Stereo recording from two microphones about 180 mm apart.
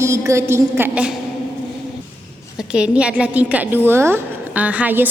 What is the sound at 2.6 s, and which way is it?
A woman's voice, 5° right (ahead or behind).